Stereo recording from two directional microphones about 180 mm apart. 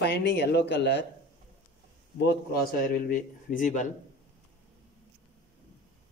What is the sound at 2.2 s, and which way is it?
A man's voice, 60° left (ahead or behind).